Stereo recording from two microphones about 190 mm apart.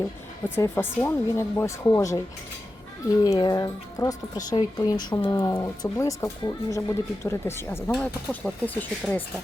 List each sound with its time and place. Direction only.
0.4 s speech: 10° left (ahead or behind)